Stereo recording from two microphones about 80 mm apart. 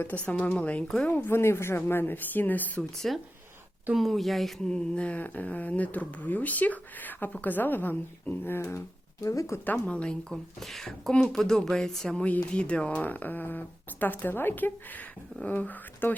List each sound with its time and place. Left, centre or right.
0.0 s speech: left
1.1 s speech: left
3.0 s speech: centre; by 9.6 s left
9.7 s speech: centre